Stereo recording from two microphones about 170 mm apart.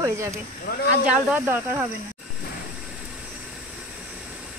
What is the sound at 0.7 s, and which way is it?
Speech, 60° left (ahead or behind).